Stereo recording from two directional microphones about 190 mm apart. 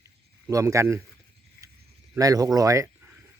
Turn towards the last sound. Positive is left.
turn(degrees=-15)  # may be behind; listen again after turning